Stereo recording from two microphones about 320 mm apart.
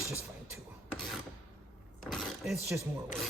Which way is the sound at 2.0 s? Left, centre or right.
Centre.